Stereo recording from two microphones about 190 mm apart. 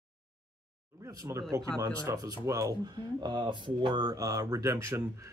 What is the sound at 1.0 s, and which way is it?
Speech, 15° right (ahead or behind).